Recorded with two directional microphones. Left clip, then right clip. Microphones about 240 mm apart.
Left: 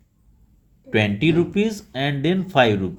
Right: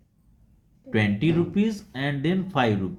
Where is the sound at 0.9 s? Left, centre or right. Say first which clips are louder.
Left 5 dB; left.